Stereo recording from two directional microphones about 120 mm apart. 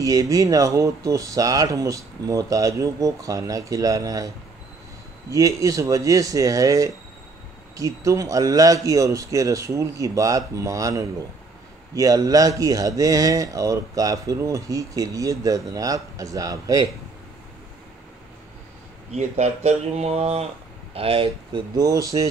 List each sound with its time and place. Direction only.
0.0 s speech: 30° right (ahead or behind)
5.3 s speech: 30° right (ahead or behind)
19.1 s speech: 70° right (ahead or behind); by 22.3 s 30° right (ahead or behind)